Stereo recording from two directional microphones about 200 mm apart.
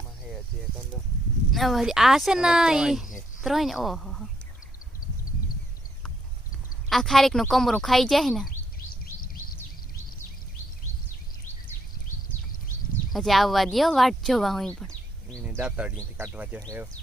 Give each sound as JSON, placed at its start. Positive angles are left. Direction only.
{"t": 1.5, "sound": "speech", "side_deg": 0}
{"t": 6.9, "sound": "speech", "side_deg": 0}
{"t": 9.2, "sound": "a sound", "side_deg": 45}
{"t": 13.1, "sound": "speech", "side_deg": 0}
{"t": 14.8, "sound": "bird", "side_deg": 5}
{"t": 15.4, "sound": "speech", "side_deg": -5}